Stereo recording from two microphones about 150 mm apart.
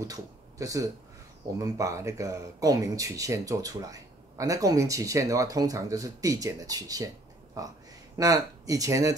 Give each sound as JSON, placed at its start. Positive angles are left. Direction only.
{"t": 0.0, "sound": "speech", "side_deg": -20}